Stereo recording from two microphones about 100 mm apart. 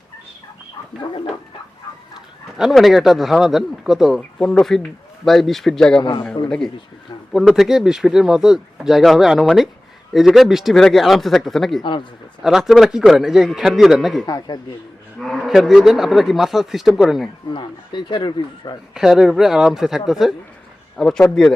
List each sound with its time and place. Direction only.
2.6 s speech: centre (ahead or behind)
4.2 s speech: 5° left (ahead or behind)
6.0 s speech: 55° left (ahead or behind)
7.3 s speech: centre (ahead or behind)
11.8 s speech: 55° left (ahead or behind)
12.4 s speech: 5° right (ahead or behind)
14.3 s speech: 40° left (ahead or behind)
15.2 s speech: centre (ahead or behind)
17.5 s speech: 55° left (ahead or behind)
18.9 s speech: 5° right (ahead or behind)